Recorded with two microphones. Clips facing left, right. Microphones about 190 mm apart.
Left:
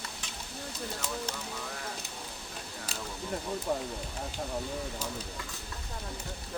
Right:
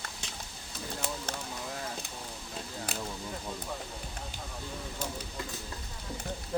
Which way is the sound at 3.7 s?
50° left (ahead or behind).